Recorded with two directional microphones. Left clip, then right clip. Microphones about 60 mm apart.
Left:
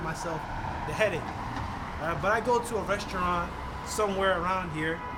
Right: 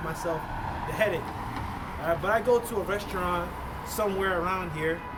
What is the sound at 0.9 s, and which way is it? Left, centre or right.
Speech, left.